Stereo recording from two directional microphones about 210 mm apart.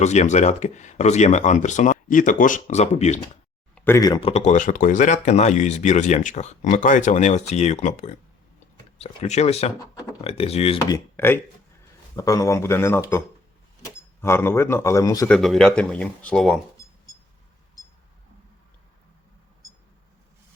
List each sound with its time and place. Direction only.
0.0 s speech: 35° left (ahead or behind)
3.8 s speech: 10° left (ahead or behind); by 9.7 s 30° left (ahead or behind)
9.7 s speech: 15° left (ahead or behind)
10.2 s speech: 30° left (ahead or behind)
10.9 s speech: 10° left (ahead or behind)
15.3 s speech: centre (ahead or behind)